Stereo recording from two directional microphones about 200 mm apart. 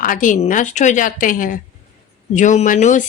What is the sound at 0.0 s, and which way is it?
Speech, 40° left (ahead or behind).